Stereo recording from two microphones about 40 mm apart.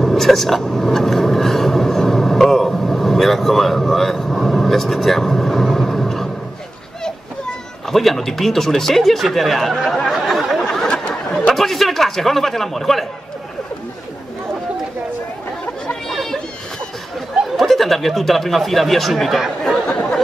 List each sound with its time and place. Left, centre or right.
0.0 s vehicle: centre
7.9 s speech: centre
9.8 s a sound: centre
10.9 s a sound: left
11.5 s speech: centre
16.1 s chatter: centre
17.6 s speech: centre